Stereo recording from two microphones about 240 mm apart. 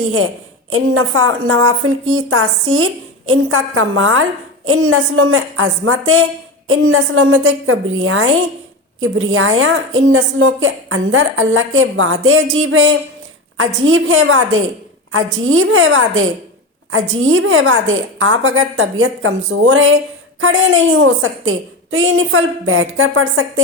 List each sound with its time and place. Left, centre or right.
0.7 s a woman's voice: right